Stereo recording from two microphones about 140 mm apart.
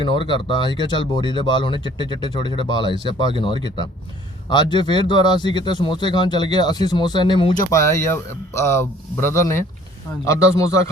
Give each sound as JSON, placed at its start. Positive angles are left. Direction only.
{"t": 0.0, "sound": "speech", "side_deg": 35}
{"t": 7.7, "sound": "a man's voice", "side_deg": 20}